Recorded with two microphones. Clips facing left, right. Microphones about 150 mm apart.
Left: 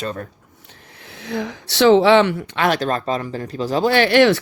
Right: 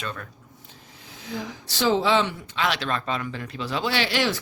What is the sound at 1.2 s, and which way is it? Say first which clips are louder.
A woman's voice: left 7 dB; 70° left (ahead or behind).